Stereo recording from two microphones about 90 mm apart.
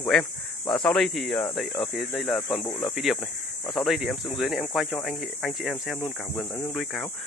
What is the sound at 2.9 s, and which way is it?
Speech, centre (ahead or behind).